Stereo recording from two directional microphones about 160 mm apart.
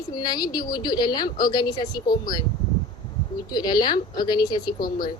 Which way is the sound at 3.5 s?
25° left (ahead or behind).